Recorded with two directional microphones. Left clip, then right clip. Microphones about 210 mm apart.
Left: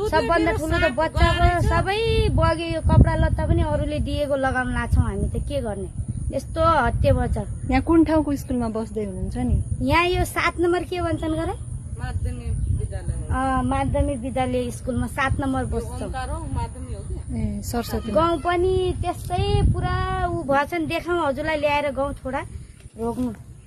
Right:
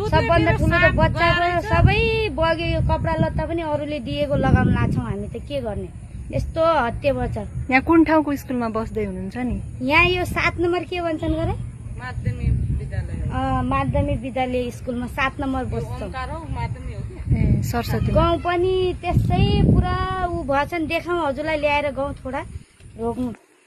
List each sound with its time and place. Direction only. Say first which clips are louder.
0.1 s speech: right 1 dB; 10° left (ahead or behind)
1.1 s speech: right 3 dB; 50° left (ahead or behind)
1.7 s speech: right 2 dB; 10° left (ahead or behind)
7.7 s speech: right 3 dB; centre (ahead or behind)
13.3 s speech: even; 10° left (ahead or behind)
16.2 s a sound: right 1 dB; 50° left (ahead or behind)
17.4 s speech: right 3 dB; centre (ahead or behind)
22.9 s speech: right 1 dB; 5° left (ahead or behind)